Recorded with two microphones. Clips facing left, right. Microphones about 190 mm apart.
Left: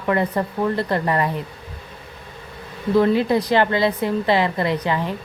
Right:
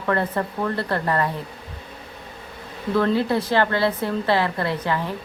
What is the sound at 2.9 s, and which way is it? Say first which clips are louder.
A woman's voice: left 3 dB; 15° left (ahead or behind).